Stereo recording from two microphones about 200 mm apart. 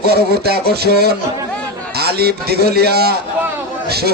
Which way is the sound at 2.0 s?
55° right (ahead or behind).